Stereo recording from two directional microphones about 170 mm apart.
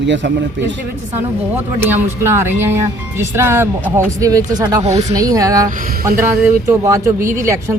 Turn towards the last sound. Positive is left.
turn(degrees=-15)  # may be behind; listen again after turning